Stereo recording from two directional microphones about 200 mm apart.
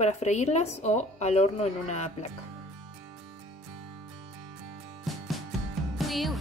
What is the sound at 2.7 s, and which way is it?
Music, centre (ahead or behind).